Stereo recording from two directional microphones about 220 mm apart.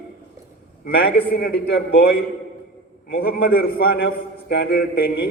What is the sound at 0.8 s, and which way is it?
A man's voice, 45° left (ahead or behind).